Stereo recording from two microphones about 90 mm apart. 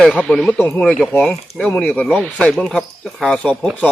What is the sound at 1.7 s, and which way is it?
Speech, 15° left (ahead or behind).